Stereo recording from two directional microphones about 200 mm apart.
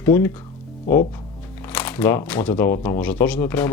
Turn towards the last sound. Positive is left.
turn(degrees=10)  # may be behind; listen again after turning